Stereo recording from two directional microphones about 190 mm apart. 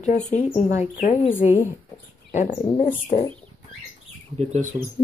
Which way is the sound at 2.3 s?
40° left (ahead or behind).